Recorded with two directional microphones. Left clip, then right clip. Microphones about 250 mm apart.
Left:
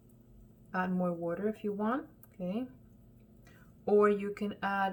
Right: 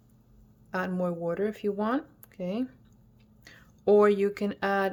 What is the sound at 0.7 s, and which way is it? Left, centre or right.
Speech, right.